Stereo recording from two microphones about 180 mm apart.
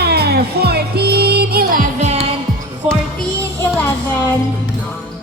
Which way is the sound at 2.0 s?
35° right (ahead or behind).